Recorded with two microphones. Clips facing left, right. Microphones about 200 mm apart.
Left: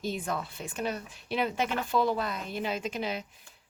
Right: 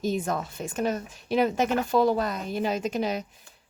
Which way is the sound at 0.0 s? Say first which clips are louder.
Right 5 dB; 45° right (ahead or behind).